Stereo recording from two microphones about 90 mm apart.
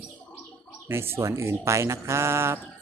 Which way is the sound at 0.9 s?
25° right (ahead or behind).